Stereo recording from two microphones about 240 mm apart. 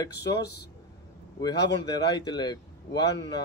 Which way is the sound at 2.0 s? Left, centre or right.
Centre.